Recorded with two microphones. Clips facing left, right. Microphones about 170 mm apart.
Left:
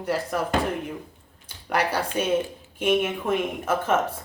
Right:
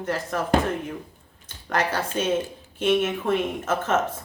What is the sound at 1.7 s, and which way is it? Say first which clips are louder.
Speech: left 1 dB; 10° left (ahead or behind).